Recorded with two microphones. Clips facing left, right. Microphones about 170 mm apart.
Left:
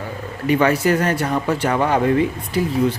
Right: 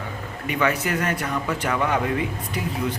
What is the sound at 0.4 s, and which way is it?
Speech, 35° left (ahead or behind).